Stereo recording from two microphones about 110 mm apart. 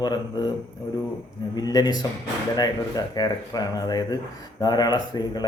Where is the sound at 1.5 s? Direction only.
35° left (ahead or behind).